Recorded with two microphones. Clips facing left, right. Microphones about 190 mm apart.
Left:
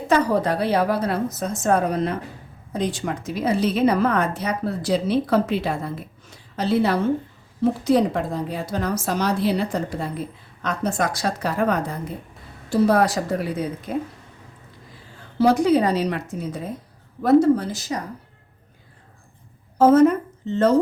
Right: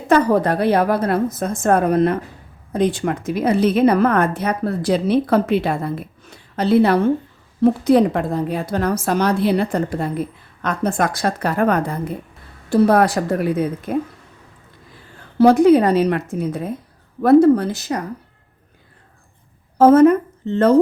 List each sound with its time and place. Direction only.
0.1 s a woman's voice: 55° right (ahead or behind)
15.4 s a woman's voice: 55° right (ahead or behind)
19.8 s speech: 55° right (ahead or behind)